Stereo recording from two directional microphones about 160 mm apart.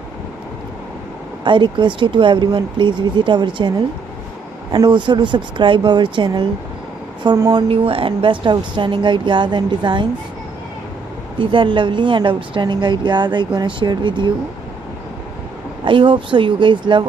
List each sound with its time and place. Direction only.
1.4 s speech: 30° right (ahead or behind)
7.6 s speech: 35° right (ahead or behind)
11.3 s speech: 30° right (ahead or behind)
15.8 s speech: 30° right (ahead or behind)